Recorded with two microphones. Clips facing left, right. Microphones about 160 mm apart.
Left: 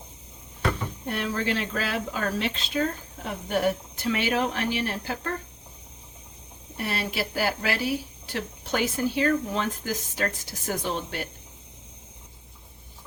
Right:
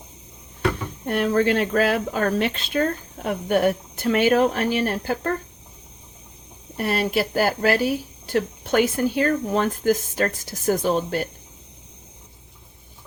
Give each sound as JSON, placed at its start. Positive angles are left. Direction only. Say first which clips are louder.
{"t": 1.0, "sound": "speech", "louder": "right 9 dB", "side_deg": -50}
{"t": 6.7, "sound": "speech", "louder": "right 7 dB", "side_deg": -45}